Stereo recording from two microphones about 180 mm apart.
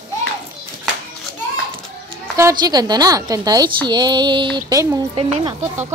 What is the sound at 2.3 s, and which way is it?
A woman's voice, 20° right (ahead or behind).